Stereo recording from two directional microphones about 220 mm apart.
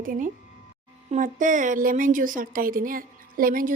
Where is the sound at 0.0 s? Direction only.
40° right (ahead or behind).